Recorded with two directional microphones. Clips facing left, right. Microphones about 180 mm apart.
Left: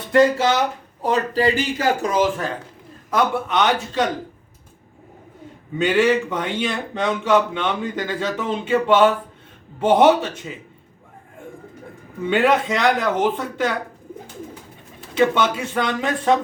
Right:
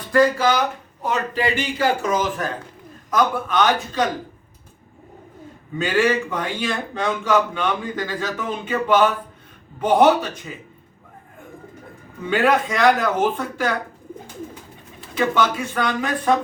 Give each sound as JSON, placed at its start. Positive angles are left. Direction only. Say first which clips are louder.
{"t": 0.1, "sound": "a man's voice", "louder": "left 1 dB", "side_deg": 25}
{"t": 1.0, "sound": "a man's voice", "louder": "left 4 dB", "side_deg": 35}
{"t": 5.7, "sound": "a man's voice", "louder": "left 2 dB", "side_deg": 20}
{"t": 12.3, "sound": "a man's voice", "louder": "left 1 dB", "side_deg": 25}
{"t": 15.1, "sound": "a man's voice", "louder": "left 2 dB", "side_deg": 25}